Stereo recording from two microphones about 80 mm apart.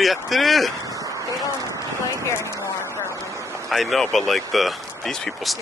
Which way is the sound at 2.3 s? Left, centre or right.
Left.